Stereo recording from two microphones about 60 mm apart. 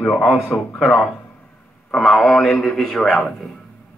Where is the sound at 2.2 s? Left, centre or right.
Centre.